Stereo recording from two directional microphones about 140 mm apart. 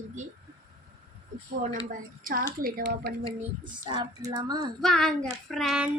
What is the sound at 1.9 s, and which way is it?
A woman's voice, 85° right.